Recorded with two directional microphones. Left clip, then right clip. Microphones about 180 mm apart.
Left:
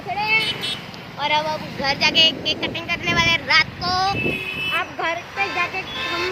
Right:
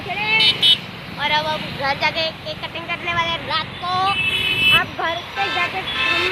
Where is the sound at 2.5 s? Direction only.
65° left (ahead or behind).